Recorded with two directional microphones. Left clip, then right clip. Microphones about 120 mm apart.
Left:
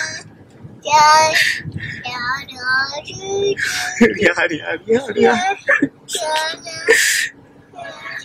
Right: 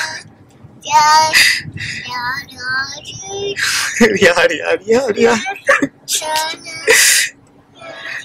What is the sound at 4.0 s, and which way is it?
Speech, 55° right (ahead or behind).